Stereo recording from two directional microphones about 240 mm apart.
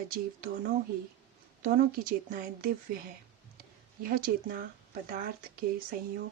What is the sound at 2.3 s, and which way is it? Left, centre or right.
Speech, right.